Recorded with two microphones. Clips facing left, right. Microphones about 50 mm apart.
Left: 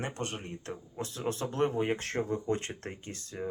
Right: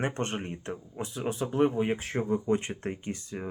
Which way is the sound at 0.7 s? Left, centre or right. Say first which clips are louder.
Right 2 dB; centre.